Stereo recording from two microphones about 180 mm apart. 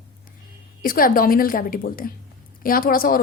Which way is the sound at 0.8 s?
50° left (ahead or behind).